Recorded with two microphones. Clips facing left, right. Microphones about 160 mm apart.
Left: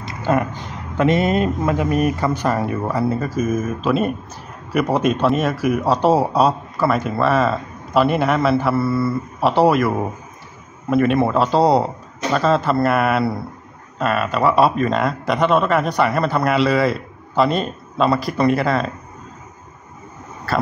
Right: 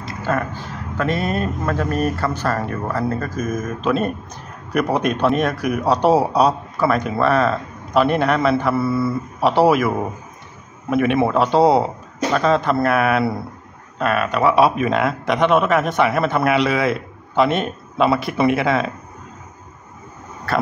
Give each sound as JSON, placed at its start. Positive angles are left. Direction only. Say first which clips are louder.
{"t": 0.3, "sound": "speech", "louder": "left 3 dB", "side_deg": 15}